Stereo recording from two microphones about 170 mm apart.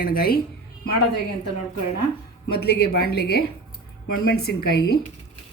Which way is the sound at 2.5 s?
70° left (ahead or behind).